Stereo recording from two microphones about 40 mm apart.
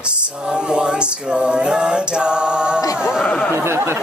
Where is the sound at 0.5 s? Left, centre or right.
Right.